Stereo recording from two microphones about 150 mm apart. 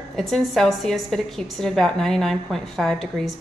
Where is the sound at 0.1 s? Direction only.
Centre (ahead or behind).